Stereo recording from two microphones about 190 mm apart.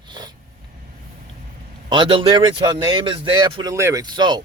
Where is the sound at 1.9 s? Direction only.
25° right (ahead or behind).